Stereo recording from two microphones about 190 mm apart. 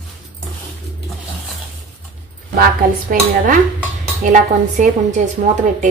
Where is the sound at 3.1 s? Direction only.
45° right (ahead or behind).